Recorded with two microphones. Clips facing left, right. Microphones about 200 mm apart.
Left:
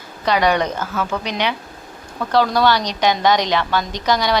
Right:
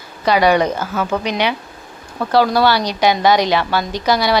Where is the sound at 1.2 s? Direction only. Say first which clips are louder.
Right 3 dB; 10° right (ahead or behind).